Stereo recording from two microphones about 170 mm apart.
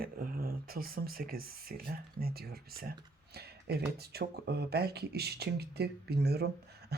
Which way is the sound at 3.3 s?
70° right (ahead or behind).